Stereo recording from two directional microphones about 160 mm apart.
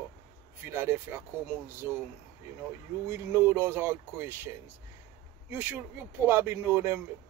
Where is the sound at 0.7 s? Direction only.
15° right (ahead or behind).